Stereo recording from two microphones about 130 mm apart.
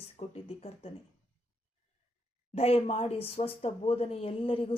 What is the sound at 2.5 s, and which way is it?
A woman's voice, 50° left (ahead or behind).